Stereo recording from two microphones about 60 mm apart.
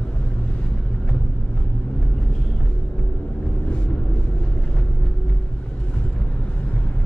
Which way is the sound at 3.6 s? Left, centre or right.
Left.